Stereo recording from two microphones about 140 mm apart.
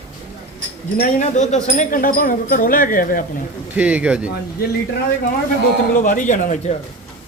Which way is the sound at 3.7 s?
10° right (ahead or behind).